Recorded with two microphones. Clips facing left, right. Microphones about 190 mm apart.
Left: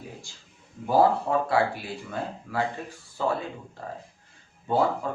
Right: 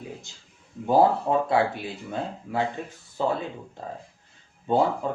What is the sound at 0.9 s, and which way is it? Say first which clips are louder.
Speech: right 1 dB; 20° right (ahead or behind).